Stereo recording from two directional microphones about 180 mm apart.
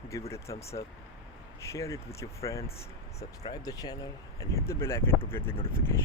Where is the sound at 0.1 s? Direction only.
15° left (ahead or behind).